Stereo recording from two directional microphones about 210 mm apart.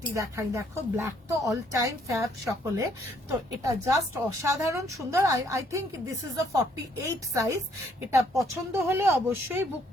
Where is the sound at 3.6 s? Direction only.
15° right (ahead or behind).